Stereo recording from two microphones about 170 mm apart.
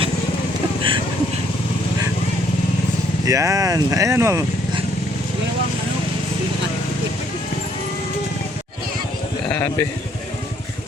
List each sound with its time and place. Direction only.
0.8 s speech: 30° right (ahead or behind)
3.2 s speech: 20° right (ahead or behind)